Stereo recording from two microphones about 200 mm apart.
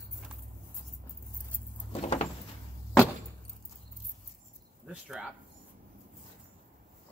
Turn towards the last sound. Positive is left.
turn(degrees=-5)  # may be behind; listen again after turning